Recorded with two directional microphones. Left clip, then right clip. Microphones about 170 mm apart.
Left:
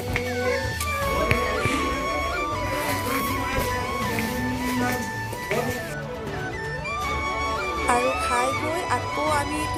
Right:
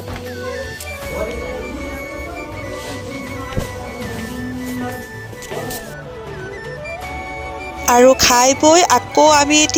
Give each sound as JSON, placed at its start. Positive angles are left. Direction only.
{"t": 7.9, "sound": "speech", "side_deg": -55}